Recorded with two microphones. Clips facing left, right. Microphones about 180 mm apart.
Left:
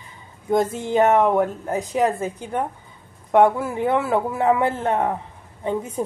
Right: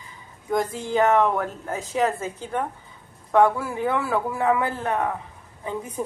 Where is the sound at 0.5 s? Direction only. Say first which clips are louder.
Left 4 dB; 25° left (ahead or behind).